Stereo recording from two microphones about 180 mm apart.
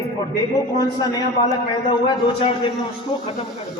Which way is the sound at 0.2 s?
20° left (ahead or behind).